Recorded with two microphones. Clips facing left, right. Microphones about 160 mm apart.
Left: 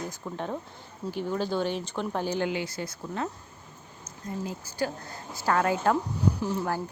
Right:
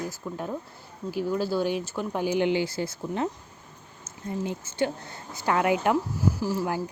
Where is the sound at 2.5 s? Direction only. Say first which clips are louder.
Right 6 dB; 25° right (ahead or behind).